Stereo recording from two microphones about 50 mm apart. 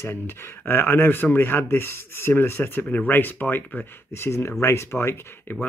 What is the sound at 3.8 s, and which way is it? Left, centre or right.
Speech, left.